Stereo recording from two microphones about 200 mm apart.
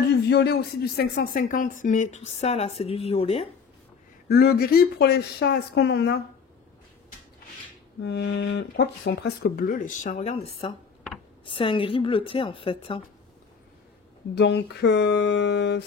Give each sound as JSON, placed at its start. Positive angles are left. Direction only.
{"t": 0.1, "sound": "speech", "side_deg": 55}
{"t": 4.3, "sound": "speech", "side_deg": 50}
{"t": 8.0, "sound": "a woman's voice", "side_deg": 60}
{"t": 14.3, "sound": "a sound", "side_deg": 55}